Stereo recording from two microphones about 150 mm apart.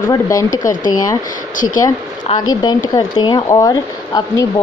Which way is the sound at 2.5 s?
30° left (ahead or behind).